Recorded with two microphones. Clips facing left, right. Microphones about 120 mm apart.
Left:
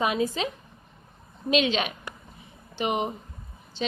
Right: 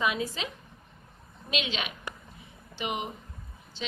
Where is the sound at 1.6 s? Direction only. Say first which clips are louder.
Left 8 dB; 40° left (ahead or behind).